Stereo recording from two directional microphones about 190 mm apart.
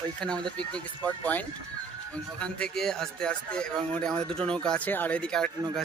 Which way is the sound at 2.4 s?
5° left (ahead or behind).